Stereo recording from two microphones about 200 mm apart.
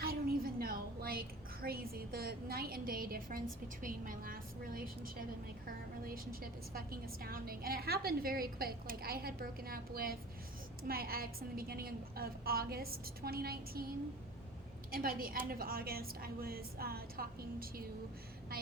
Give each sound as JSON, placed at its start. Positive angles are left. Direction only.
{"t": 0.0, "sound": "a sound", "side_deg": -50}
{"t": 1.6, "sound": "a woman's voice", "side_deg": -50}
{"t": 14.9, "sound": "a woman's voice", "side_deg": -45}